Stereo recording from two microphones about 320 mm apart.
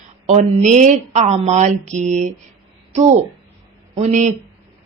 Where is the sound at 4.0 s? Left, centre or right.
Right.